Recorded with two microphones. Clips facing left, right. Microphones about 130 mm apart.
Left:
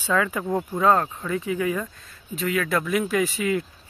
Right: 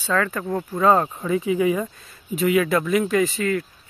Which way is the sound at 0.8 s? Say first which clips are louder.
Right 3 dB; 10° right (ahead or behind).